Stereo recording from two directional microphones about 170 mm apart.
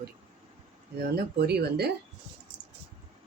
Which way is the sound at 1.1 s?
70° right (ahead or behind).